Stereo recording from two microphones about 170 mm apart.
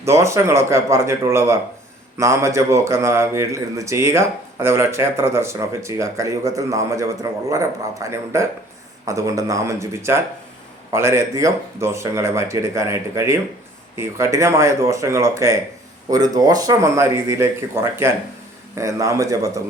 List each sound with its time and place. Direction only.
0.0 s a man's voice: 15° right (ahead or behind)